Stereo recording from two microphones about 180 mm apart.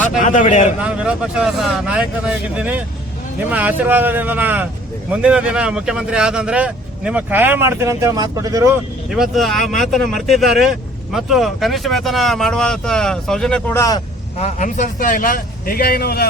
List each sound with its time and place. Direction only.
0.2 s a man's voice: 45° left (ahead or behind)
0.8 s speech: 5° right (ahead or behind)
9.0 s speech: centre (ahead or behind)
13.7 s speech: 20° left (ahead or behind)
14.3 s a man's voice: 40° left (ahead or behind); by 16.3 s 60° left (ahead or behind)